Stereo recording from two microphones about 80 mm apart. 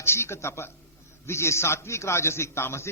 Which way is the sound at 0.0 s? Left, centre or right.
Left.